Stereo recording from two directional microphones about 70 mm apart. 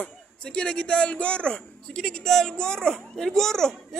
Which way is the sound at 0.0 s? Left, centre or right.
Centre.